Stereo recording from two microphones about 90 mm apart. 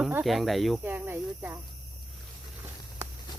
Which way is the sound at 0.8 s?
20° right (ahead or behind).